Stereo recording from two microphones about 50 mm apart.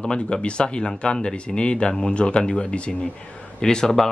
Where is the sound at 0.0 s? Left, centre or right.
Centre.